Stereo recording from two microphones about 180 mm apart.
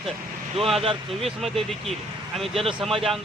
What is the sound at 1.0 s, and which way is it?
Speech, centre (ahead or behind).